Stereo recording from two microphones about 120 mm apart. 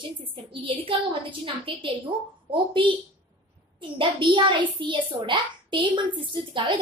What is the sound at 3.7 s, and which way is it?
A child's voice, 45° right (ahead or behind).